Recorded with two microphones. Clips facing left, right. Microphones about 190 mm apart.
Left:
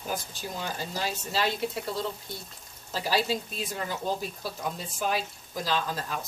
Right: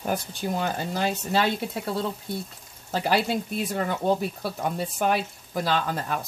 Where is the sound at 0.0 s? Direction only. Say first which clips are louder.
Right 6 dB; 60° right (ahead or behind).